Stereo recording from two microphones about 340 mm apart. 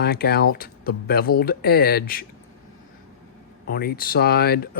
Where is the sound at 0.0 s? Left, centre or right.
Left.